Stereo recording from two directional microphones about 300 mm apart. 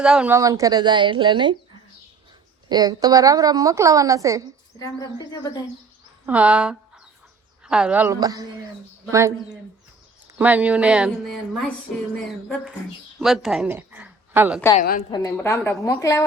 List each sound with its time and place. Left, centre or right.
0.0 s a woman's voice: centre
2.6 s a woman's voice: centre
4.8 s a woman's voice: centre
6.2 s a woman's voice: centre
13.1 s speech: centre
14.8 s a woman's voice: left
15.1 s a woman's voice: centre